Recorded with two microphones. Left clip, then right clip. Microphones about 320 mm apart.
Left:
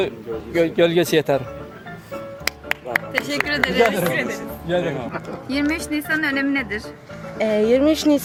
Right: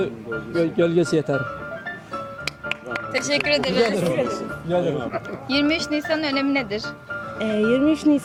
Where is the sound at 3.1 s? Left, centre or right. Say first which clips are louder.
Right 6 dB; centre.